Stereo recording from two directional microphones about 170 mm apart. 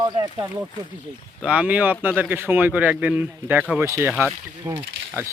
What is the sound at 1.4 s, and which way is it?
Speech, 5° right (ahead or behind).